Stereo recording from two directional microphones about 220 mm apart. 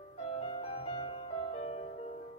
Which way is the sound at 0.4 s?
25° left (ahead or behind).